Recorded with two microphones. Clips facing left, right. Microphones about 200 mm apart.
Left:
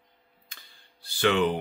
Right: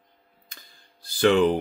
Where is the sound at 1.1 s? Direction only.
40° right (ahead or behind).